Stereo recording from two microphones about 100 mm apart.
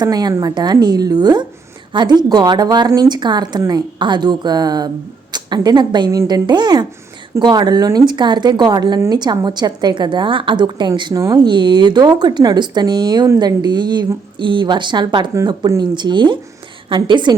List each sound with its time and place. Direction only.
0.0 s a woman's voice: 40° right (ahead or behind)
11.1 s speech: 30° right (ahead or behind)
11.4 s a woman's voice: 50° right (ahead or behind)